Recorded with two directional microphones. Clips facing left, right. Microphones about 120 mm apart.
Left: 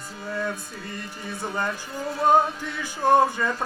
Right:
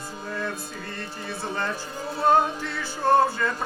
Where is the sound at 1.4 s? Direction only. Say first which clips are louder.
Left 1 dB; 15° left (ahead or behind).